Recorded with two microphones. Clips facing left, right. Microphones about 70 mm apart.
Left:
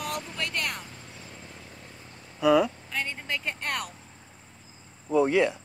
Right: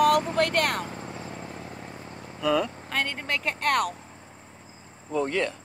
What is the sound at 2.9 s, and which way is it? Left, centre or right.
Vehicle, right.